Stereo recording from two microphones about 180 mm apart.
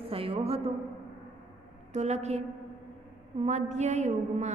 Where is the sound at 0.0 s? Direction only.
30° right (ahead or behind).